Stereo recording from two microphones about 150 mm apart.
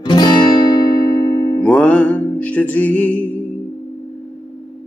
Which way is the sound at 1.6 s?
10° left (ahead or behind).